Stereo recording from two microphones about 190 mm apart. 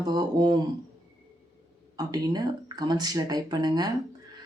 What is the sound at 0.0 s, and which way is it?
Speech, 20° right (ahead or behind).